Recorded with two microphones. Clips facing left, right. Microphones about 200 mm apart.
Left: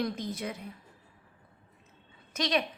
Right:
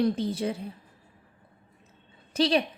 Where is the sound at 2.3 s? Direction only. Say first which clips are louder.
Right 6 dB; 30° right (ahead or behind).